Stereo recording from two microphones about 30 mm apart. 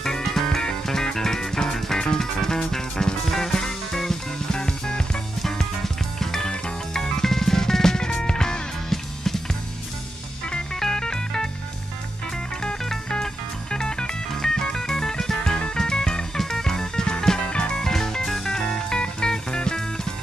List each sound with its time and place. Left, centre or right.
0.0 s music: centre
8.9 s music: centre
10.8 s music: left
13.1 s music: left
15.5 s music: left
15.8 s music: left
17.4 s music: left
17.7 s music: centre